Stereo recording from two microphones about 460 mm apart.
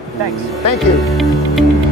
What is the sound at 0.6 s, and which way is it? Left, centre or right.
Speech, left.